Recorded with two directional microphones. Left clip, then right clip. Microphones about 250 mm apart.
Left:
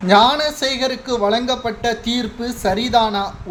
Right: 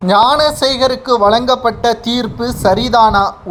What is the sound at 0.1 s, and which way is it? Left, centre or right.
A woman's voice, centre.